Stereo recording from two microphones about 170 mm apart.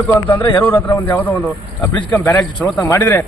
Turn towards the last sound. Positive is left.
turn(degrees=10)  # may be behind; listen again after turning